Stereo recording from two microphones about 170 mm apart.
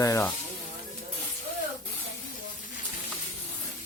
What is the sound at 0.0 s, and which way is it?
Speech, 15° left (ahead or behind).